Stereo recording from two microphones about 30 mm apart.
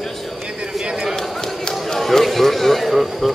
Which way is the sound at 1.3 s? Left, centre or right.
Centre.